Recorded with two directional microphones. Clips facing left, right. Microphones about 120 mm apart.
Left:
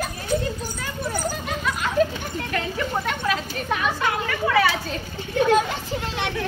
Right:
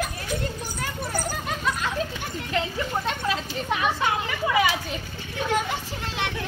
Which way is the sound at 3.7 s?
20° right (ahead or behind).